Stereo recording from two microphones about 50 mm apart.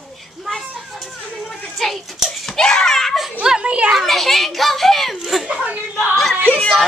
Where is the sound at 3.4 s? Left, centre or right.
Centre.